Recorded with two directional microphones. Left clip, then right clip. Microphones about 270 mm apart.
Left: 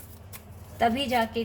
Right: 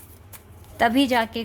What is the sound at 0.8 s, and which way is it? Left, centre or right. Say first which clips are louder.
Speech: right 5 dB; right.